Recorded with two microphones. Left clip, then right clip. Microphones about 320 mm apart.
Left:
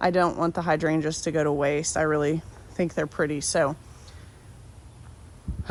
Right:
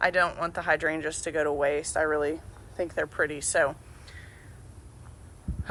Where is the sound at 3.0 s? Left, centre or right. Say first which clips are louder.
Even; centre.